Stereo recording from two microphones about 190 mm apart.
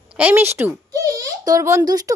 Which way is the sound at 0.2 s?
10° right (ahead or behind).